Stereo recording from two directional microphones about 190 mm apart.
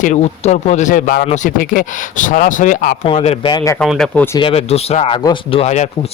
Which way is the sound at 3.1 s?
35° left (ahead or behind).